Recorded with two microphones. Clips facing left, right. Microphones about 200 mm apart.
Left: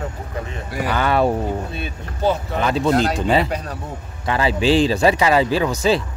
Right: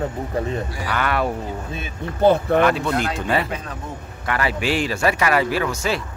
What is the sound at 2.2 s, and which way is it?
Speech, 60° right (ahead or behind).